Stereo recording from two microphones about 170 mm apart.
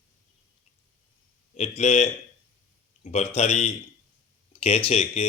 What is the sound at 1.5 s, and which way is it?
Speech, 40° left (ahead or behind).